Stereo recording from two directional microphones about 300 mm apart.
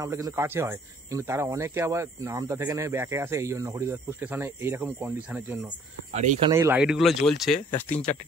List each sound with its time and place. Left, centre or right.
0.0 s speech: centre
6.1 s speech: right
6.5 s speech: centre